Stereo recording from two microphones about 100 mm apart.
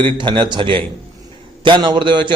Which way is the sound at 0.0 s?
55° right (ahead or behind).